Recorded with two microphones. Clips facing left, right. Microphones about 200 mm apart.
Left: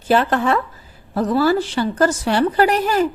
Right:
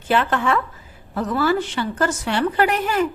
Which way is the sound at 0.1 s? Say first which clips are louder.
Left 3 dB; 35° left (ahead or behind).